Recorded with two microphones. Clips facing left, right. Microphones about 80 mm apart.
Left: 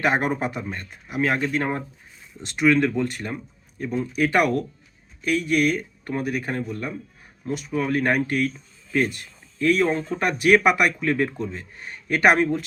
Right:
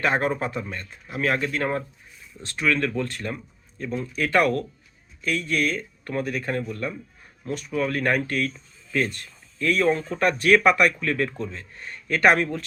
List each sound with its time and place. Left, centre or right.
0.0 s speech: centre